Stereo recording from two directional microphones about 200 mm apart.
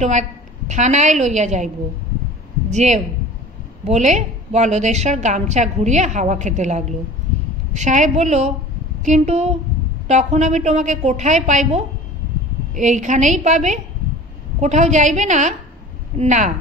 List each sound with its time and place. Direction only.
0.0 s a woman's voice: 35° right (ahead or behind)
2.7 s a woman's voice: 35° right (ahead or behind)